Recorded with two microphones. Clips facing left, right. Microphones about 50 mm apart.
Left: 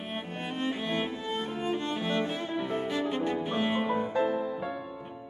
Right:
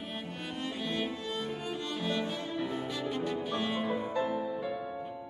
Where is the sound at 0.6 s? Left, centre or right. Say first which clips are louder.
Left 4 dB; left.